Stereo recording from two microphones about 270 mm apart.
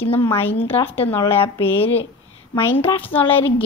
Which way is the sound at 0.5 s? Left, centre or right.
Centre.